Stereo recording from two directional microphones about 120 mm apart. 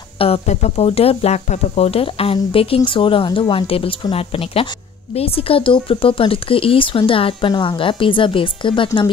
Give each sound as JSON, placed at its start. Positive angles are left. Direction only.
{"t": 0.2, "sound": "speech", "side_deg": 60}